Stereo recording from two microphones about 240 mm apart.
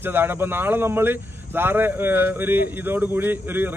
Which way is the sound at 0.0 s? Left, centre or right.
Centre.